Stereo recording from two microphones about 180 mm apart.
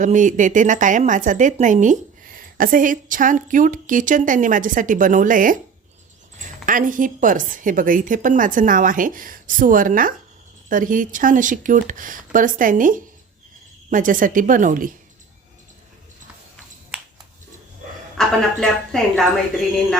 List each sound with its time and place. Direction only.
0.0 s a woman's voice: 45° right (ahead or behind)
6.7 s a woman's voice: 50° right (ahead or behind)
18.2 s a woman's voice: centre (ahead or behind)